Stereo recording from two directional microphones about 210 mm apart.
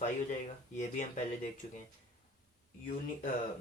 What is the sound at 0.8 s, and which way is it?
Speech, 35° left (ahead or behind).